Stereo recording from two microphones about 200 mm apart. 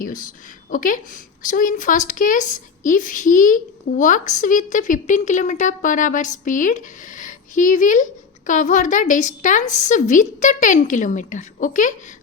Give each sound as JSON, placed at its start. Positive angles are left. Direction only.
{"t": 0.0, "sound": "a woman's voice", "side_deg": 45}